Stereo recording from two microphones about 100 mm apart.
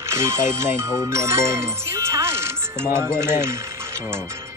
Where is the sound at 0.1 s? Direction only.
25° right (ahead or behind).